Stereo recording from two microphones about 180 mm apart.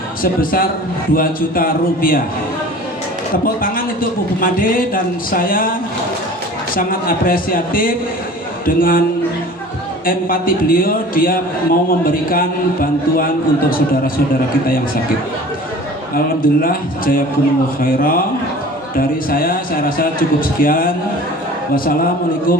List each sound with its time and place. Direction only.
0.2 s a man's voice: 50° left (ahead or behind)
3.4 s a man's voice: 50° left (ahead or behind)
6.7 s a man's voice: 50° left (ahead or behind)
10.1 s a man's voice: 50° left (ahead or behind)
16.1 s a man's voice: 55° left (ahead or behind)